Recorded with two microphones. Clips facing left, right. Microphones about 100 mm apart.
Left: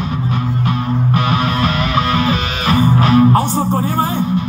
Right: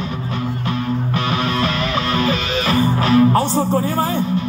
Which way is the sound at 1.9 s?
30° left (ahead or behind).